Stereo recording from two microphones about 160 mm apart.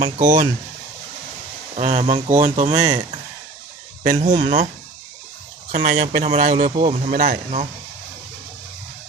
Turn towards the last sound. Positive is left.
turn(degrees=-55)  # may be behind; listen again after turning